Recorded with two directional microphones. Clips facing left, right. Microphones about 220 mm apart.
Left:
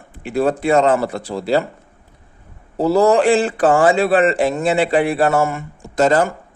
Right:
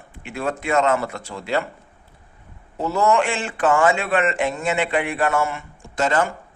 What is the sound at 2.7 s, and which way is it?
A man's voice, 35° left (ahead or behind).